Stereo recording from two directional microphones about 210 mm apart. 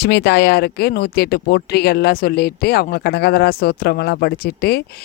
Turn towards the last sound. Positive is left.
turn(degrees=50)  # may be behind; listen again after turning